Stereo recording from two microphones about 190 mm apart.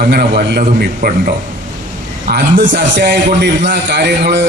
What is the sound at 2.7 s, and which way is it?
A man's voice, 65° right (ahead or behind).